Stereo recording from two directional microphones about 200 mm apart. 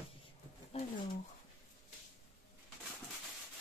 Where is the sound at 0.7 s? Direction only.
30° left (ahead or behind).